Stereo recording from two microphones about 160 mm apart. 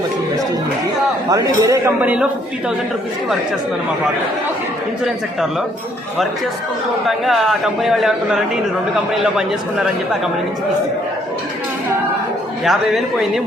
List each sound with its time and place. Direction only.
1.3 s speech: 20° right (ahead or behind)
2.0 s a man's voice: 10° right (ahead or behind)
5.0 s a man's voice: 5° right (ahead or behind)
7.3 s a man's voice: centre (ahead or behind)
12.6 s a man's voice: centre (ahead or behind)